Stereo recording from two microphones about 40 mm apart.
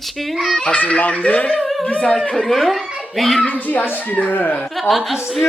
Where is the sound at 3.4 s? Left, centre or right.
Left.